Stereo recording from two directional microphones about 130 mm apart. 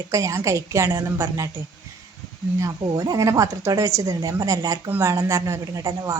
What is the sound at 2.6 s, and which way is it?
A woman's voice, 25° right (ahead or behind).